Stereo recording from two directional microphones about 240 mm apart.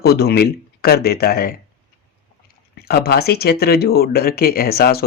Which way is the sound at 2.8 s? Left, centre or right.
Left.